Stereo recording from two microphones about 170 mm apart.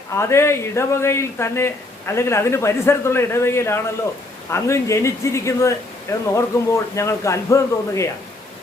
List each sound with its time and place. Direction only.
0.1 s speech: 15° left (ahead or behind)